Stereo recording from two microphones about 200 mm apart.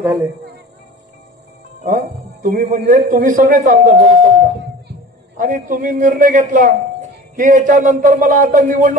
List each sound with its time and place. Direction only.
0.0 s speech: 10° right (ahead or behind)
2.0 s a man's voice: 40° right (ahead or behind)